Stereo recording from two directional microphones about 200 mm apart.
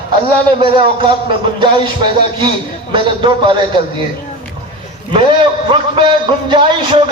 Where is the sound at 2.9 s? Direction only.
25° right (ahead or behind).